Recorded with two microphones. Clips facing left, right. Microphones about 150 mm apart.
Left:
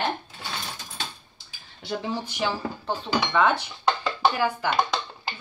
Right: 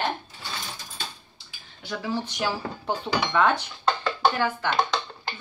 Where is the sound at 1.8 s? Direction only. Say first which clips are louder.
Left 3 dB; 30° left (ahead or behind).